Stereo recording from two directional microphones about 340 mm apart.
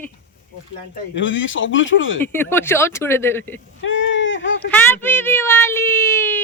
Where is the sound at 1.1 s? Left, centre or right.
Left.